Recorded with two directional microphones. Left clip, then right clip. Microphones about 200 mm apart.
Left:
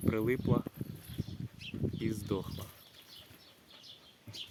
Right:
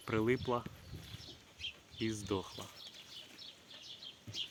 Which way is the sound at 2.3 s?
5° left (ahead or behind).